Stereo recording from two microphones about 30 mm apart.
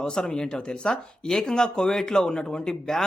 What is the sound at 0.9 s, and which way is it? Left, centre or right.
A man's voice, centre.